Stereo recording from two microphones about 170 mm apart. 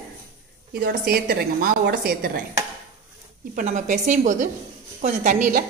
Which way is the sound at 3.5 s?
50° right (ahead or behind).